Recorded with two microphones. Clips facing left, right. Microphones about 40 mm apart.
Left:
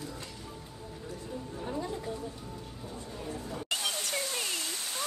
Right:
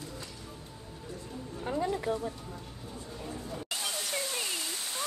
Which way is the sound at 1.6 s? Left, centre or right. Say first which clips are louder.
Right 5 dB; right.